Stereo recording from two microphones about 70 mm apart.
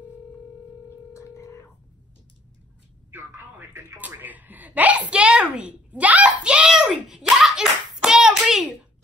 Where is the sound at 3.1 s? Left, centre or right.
Right.